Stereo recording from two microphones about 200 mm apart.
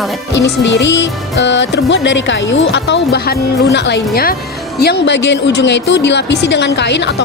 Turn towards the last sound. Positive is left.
turn(degrees=60)  # may be behind; listen again after turning